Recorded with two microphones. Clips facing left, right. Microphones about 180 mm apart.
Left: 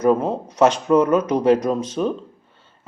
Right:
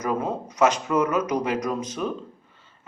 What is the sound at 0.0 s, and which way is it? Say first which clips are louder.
Speech: left 8 dB; 30° left (ahead or behind).